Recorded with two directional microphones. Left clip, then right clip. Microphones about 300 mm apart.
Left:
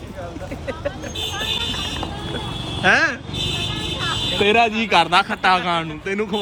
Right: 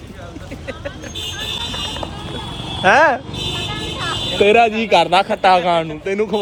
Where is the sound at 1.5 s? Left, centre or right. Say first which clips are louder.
Even; centre.